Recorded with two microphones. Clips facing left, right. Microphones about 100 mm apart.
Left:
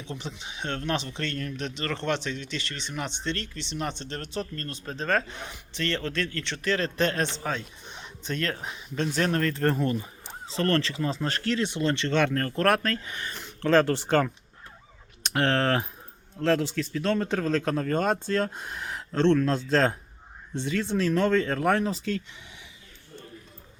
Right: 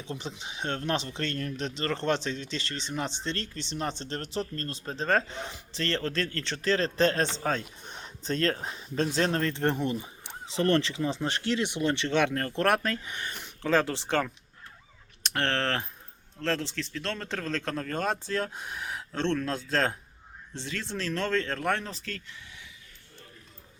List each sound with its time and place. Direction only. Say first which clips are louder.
0.2 s a man's voice: even; 35° right (ahead or behind); by 21.9 s 5° left (ahead or behind)
22.0 s speech: left 9 dB; 20° left (ahead or behind)